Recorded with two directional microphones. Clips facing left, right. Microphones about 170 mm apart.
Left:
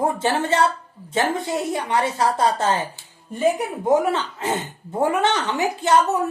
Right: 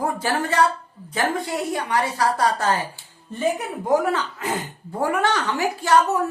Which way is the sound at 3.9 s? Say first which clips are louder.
Left 1 dB; 25° left (ahead or behind).